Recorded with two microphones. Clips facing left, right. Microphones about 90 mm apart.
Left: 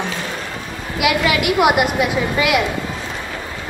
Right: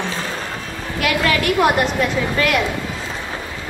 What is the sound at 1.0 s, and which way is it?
A woman's voice, 10° left (ahead or behind).